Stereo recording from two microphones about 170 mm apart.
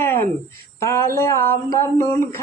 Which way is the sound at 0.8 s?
15° left (ahead or behind).